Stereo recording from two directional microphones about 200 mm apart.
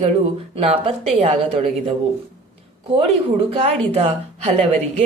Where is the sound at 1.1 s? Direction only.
30° right (ahead or behind).